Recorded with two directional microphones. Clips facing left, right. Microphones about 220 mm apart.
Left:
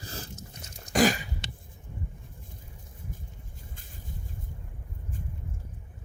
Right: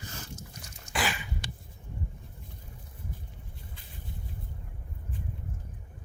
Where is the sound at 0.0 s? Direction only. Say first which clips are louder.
Left 2 dB; 30° left (ahead or behind).